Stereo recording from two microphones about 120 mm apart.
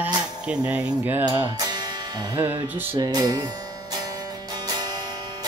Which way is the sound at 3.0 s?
30° right (ahead or behind).